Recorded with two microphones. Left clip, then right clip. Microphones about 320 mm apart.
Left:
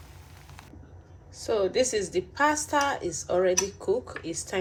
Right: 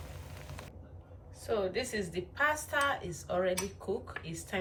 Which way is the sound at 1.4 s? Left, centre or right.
Centre.